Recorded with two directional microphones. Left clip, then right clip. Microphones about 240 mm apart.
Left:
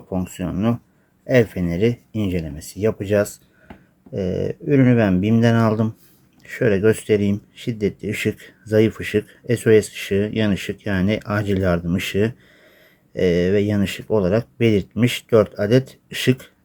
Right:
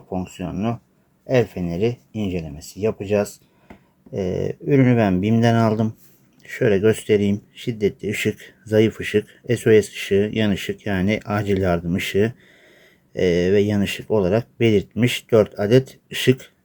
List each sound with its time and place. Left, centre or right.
0.1 s speech: centre
4.1 s speech: centre